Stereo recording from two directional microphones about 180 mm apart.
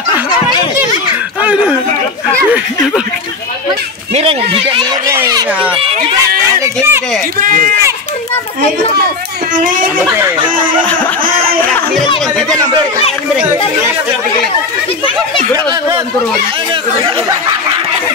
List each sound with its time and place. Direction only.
1.4 s speech: 10° right (ahead or behind)
4.1 s speech: 30° right (ahead or behind)
5.1 s speech: 15° right (ahead or behind)
5.8 s speech: 30° right (ahead or behind)
6.6 s speech: 15° right (ahead or behind)
9.6 s speech: 50° right (ahead or behind)
9.9 s speech: 15° right (ahead or behind)
11.2 s a sound: 55° right (ahead or behind)